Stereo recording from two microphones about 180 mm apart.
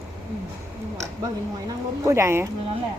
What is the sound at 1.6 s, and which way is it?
Speech, 15° right (ahead or behind).